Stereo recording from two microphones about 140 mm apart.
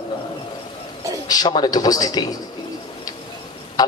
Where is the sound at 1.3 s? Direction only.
30° left (ahead or behind).